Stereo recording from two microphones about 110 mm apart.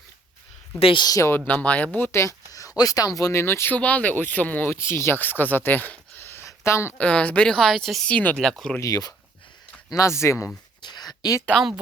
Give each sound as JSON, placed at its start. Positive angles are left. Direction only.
{"t": 0.8, "sound": "speech", "side_deg": 55}
{"t": 1.0, "sound": "speech", "side_deg": 30}
{"t": 1.5, "sound": "speech", "side_deg": 10}
{"t": 7.0, "sound": "a woman's voice", "side_deg": 10}
{"t": 8.1, "sound": "a woman's voice", "side_deg": 10}
{"t": 8.8, "sound": "speech", "side_deg": 35}
{"t": 10.8, "sound": "a sound", "side_deg": 40}